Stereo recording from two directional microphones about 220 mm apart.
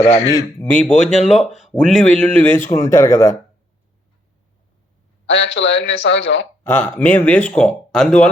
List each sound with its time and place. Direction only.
0.0 s speech: 30° left (ahead or behind)
0.3 s speech: 10° left (ahead or behind)
5.2 s a man's voice: 55° left (ahead or behind)
6.7 s speech: 10° left (ahead or behind)